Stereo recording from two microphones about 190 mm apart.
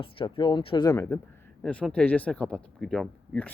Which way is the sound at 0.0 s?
25° left (ahead or behind).